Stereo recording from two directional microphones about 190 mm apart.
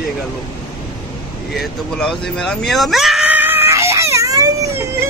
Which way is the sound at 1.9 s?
5° left (ahead or behind).